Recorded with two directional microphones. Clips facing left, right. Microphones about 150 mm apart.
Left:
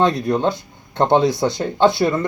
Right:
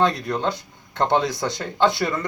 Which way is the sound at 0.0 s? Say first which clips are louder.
Left 4 dB; 25° left (ahead or behind).